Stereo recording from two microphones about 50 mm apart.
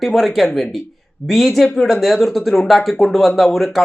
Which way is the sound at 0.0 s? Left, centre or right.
Centre.